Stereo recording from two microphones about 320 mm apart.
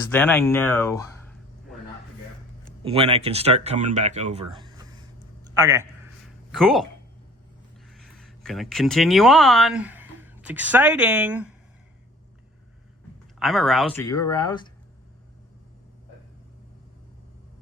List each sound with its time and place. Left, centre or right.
0.1 s a sound: centre
2.8 s a man's voice: centre
6.5 s speech: centre
7.9 s speech: centre
13.4 s speech: centre